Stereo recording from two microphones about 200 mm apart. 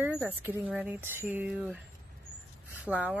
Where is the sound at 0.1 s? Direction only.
10° left (ahead or behind).